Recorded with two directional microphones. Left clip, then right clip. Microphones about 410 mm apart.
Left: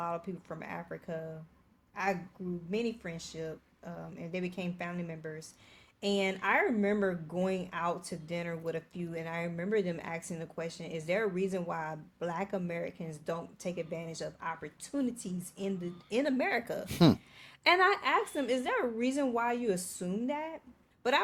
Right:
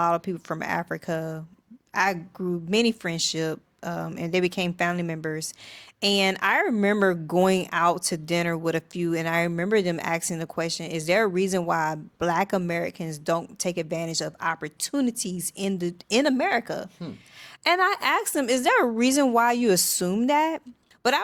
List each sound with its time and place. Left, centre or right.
0.0 s a woman's voice: right